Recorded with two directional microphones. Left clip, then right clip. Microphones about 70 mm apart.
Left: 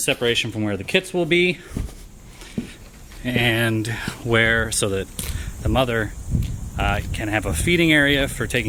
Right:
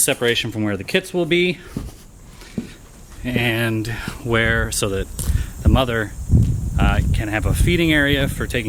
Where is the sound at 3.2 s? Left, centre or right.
Centre.